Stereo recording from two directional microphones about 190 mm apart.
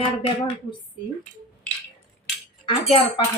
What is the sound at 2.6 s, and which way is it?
Speech, 30° left (ahead or behind).